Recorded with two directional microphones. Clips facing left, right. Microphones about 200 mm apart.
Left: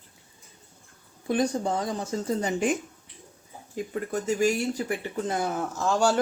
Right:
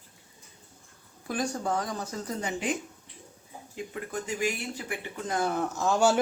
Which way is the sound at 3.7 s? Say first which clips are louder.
Left 5 dB; 40° left (ahead or behind).